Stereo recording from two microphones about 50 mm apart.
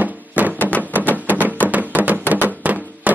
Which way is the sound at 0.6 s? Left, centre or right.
Left.